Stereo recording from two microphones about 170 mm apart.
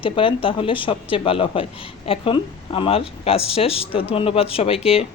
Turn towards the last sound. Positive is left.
turn(degrees=35)  # may be behind; listen again after turning